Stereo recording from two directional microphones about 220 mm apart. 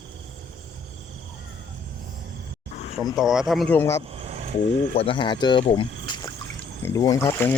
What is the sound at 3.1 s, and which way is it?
Speech, centre (ahead or behind).